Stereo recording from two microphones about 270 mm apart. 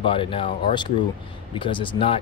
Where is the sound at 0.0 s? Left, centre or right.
Centre.